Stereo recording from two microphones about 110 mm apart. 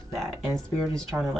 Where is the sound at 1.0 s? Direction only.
5° left (ahead or behind).